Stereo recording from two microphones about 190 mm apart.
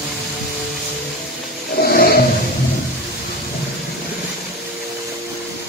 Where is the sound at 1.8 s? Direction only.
50° left (ahead or behind).